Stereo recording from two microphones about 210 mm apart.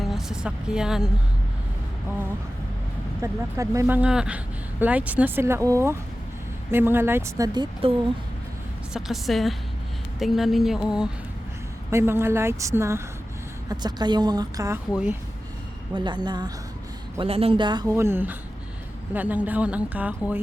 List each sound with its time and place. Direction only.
0.0 s a woman's voice: centre (ahead or behind)
3.2 s a woman's voice: 15° right (ahead or behind)
8.9 s a woman's voice: centre (ahead or behind)
16.0 s a man's voice: 20° right (ahead or behind)